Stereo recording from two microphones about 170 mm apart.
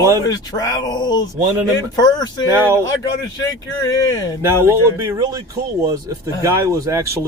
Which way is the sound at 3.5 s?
20° left (ahead or behind).